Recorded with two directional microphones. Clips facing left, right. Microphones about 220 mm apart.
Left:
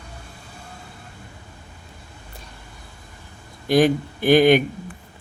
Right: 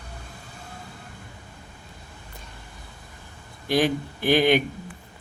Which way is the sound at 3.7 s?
45° left (ahead or behind).